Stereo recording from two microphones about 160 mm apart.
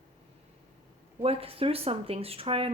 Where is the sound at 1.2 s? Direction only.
35° right (ahead or behind).